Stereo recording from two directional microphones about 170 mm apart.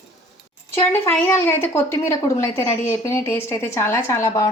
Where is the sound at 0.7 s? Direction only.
15° left (ahead or behind).